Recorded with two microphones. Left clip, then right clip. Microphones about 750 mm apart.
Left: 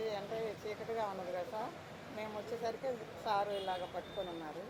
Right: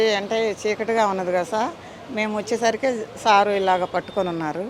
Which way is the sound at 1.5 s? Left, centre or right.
Right.